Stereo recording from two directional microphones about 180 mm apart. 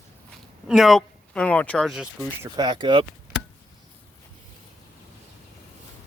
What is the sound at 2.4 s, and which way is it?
Speech, 25° right (ahead or behind).